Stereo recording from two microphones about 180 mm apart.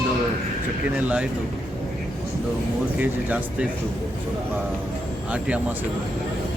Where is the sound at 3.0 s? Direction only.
10° right (ahead or behind).